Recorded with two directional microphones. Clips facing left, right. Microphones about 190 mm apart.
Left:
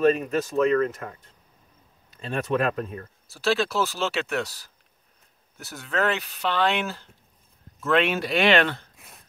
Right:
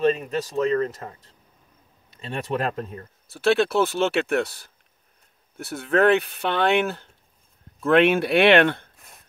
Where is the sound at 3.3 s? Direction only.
60° right (ahead or behind).